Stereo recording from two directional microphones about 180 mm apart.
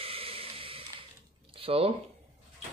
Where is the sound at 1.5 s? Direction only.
30° right (ahead or behind).